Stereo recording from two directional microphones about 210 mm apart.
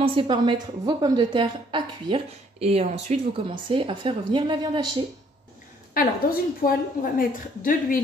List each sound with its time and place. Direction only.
0.0 s a woman's voice: 25° right (ahead or behind)
5.9 s a woman's voice: 45° left (ahead or behind)